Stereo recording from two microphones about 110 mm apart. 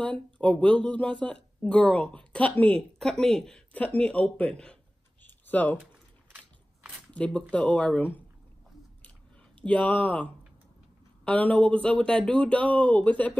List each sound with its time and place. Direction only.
0.0 s speech: 10° left (ahead or behind)
5.2 s a sound: 15° left (ahead or behind)
7.2 s speech: 10° left (ahead or behind)
9.6 s speech: 10° left (ahead or behind)